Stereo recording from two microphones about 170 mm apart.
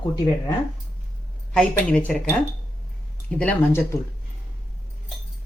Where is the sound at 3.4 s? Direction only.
10° left (ahead or behind).